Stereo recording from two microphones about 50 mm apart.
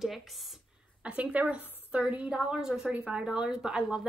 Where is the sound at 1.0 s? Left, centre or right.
Right.